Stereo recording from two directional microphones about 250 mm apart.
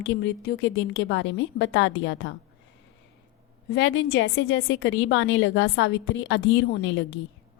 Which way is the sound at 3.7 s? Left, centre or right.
Left.